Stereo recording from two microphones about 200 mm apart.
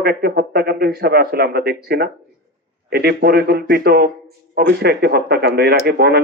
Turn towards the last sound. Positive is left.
turn(degrees=-55)  # may be behind; listen again after turning